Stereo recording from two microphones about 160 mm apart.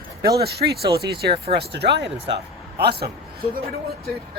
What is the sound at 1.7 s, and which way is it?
Speech, 90° right.